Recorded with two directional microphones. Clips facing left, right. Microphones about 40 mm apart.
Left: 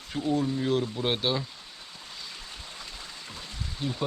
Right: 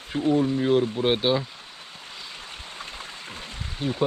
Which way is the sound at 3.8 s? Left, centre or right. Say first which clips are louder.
Right 5 dB; right.